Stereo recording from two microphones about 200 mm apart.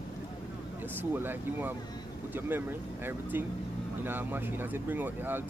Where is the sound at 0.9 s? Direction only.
10° right (ahead or behind).